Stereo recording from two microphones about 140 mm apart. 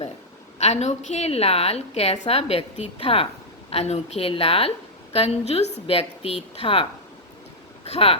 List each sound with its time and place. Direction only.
0.6 s a woman's voice: 55° left (ahead or behind)
7.9 s a woman's voice: 45° left (ahead or behind)